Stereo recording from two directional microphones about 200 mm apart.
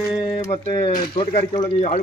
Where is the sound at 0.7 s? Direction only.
25° left (ahead or behind).